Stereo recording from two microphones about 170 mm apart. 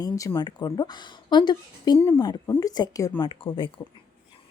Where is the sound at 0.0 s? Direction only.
20° left (ahead or behind).